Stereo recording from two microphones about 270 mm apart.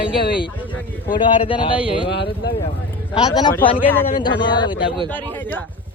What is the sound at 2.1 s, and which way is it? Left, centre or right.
Speech, left.